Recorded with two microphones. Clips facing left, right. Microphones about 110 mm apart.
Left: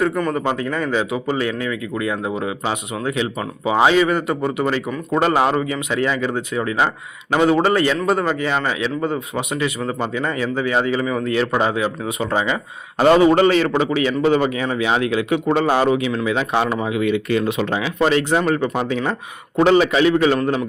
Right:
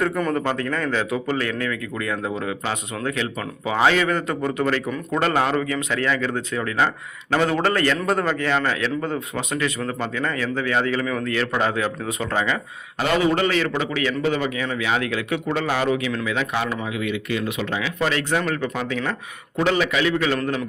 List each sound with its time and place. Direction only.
0.0 s a man's voice: centre (ahead or behind)
13.0 s a man's voice: 35° left (ahead or behind); by 20.7 s 20° left (ahead or behind)